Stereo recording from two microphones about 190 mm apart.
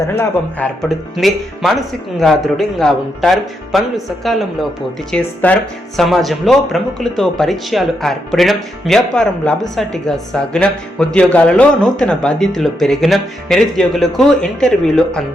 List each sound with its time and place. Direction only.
0.2 s speech: 5° left (ahead or behind)